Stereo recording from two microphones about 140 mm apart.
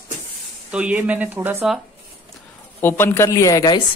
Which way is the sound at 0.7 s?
10° right (ahead or behind).